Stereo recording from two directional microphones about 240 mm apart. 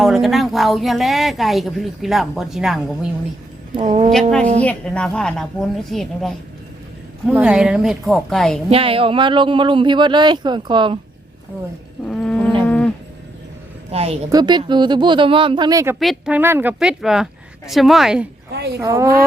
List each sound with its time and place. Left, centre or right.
0.0 s a woman's voice: centre
3.8 s speech: right
4.1 s a woman's voice: centre
8.7 s speech: right
12.0 s wild animals: centre
12.6 s livestock: centre
13.9 s speech: right
16.0 s a woman's voice: centre
18.5 s speech: right
18.8 s speech: centre